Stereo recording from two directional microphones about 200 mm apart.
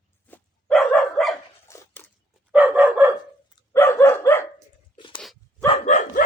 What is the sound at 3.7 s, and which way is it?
Dog, 10° left (ahead or behind).